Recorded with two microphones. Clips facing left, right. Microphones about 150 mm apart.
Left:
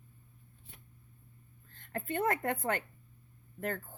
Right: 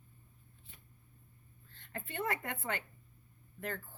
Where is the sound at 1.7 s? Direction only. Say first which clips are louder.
Left 8 dB; 45° left (ahead or behind).